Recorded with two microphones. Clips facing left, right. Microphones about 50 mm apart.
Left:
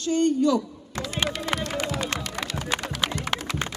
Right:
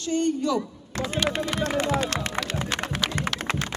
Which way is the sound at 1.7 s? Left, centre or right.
Right.